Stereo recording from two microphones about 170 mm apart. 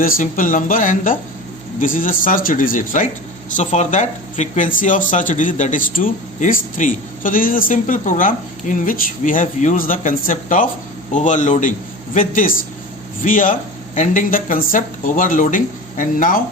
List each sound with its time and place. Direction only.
0.0 s speech: 55° left (ahead or behind)